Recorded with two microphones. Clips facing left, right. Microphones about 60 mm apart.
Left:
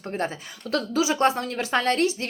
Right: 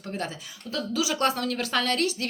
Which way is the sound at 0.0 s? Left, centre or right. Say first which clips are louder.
Left 4 dB; left.